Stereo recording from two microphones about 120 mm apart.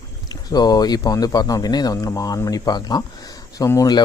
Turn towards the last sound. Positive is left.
turn(degrees=30)  # may be behind; listen again after turning